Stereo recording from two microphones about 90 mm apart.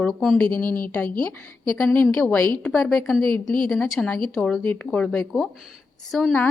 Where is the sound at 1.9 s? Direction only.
20° left (ahead or behind).